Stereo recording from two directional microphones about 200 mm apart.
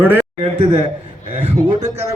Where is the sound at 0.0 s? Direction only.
10° right (ahead or behind).